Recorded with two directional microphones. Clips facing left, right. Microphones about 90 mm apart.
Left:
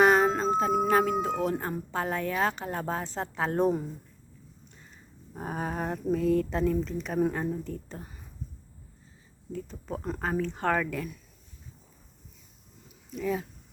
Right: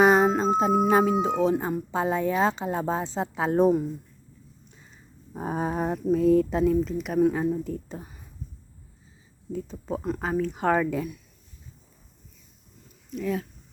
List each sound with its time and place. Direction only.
0.0 s music: 15° right (ahead or behind)
0.9 s speech: 15° right (ahead or behind)
5.3 s a sound: 20° right (ahead or behind)
6.1 s speech: 15° right (ahead or behind)
9.5 s speech: 15° right (ahead or behind)
10.0 s speech: 5° right (ahead or behind)
13.1 s speech: centre (ahead or behind)